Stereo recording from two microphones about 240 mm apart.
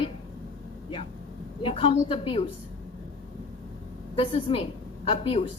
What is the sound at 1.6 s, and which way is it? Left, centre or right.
Speech, left.